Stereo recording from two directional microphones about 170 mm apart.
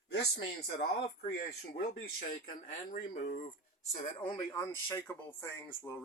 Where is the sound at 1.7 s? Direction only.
65° left (ahead or behind).